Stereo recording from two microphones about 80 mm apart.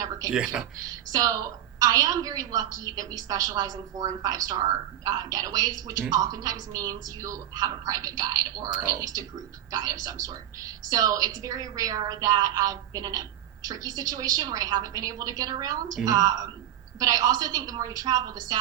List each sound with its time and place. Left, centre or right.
1.1 s a woman's voice: right